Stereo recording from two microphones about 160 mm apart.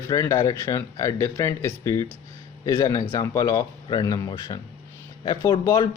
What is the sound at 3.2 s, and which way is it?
Speech, 20° left (ahead or behind).